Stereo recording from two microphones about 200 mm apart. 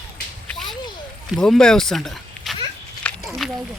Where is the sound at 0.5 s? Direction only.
Centre (ahead or behind).